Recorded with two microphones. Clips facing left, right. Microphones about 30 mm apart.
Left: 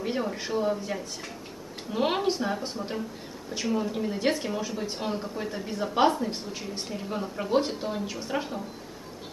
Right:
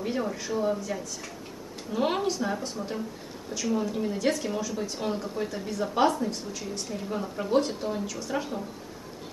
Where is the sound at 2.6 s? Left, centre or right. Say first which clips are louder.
Even; left.